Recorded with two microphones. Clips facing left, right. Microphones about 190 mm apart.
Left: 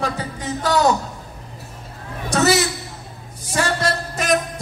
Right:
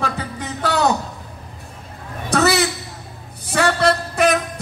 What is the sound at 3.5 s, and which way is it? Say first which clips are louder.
Music: right 4 dB; 65° right (ahead or behind).